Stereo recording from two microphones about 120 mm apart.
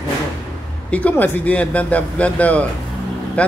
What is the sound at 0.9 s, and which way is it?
Speech, 10° left (ahead or behind).